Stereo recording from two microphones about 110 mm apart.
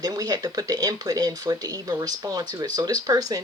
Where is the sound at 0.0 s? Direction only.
35° right (ahead or behind).